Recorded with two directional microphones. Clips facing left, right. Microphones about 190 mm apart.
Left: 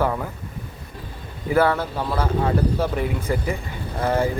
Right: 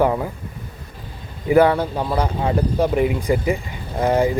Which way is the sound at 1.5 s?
15° right (ahead or behind).